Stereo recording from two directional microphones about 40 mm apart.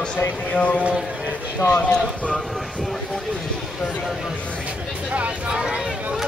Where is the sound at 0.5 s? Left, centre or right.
Left.